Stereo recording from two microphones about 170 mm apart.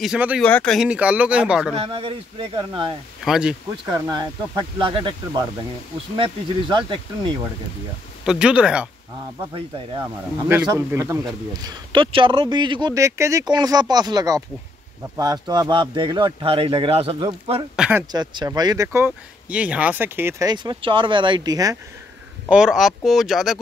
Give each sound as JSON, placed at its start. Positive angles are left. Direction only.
{"t": 0.0, "sound": "speech", "side_deg": -5}
{"t": 0.4, "sound": "speech", "side_deg": 5}
{"t": 0.7, "sound": "speech", "side_deg": -5}
{"t": 1.8, "sound": "speech", "side_deg": -30}
{"t": 3.3, "sound": "speech", "side_deg": -5}
{"t": 3.8, "sound": "speech", "side_deg": -20}
{"t": 6.1, "sound": "speech", "side_deg": -30}
{"t": 8.3, "sound": "speech", "side_deg": -5}
{"t": 10.5, "sound": "speech", "side_deg": -15}
{"t": 11.5, "sound": "speech", "side_deg": -25}
{"t": 17.7, "sound": "speech", "side_deg": -5}
{"t": 18.1, "sound": "speech", "side_deg": -25}
{"t": 22.5, "sound": "speech", "side_deg": -5}